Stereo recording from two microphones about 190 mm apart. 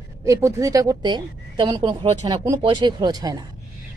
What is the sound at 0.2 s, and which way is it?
A woman's voice, 15° right (ahead or behind).